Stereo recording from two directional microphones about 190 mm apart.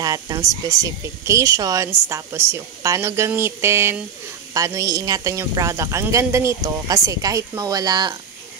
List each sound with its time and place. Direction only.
0.0 s speech: 20° right (ahead or behind)